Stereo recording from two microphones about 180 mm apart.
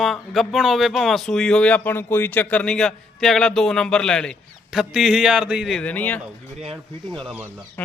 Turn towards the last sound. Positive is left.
turn(degrees=0)  # may be behind; listen again after turning